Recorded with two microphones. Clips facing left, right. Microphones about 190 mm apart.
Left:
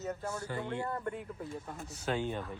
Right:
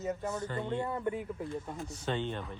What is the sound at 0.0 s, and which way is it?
Speech, 5° right (ahead or behind).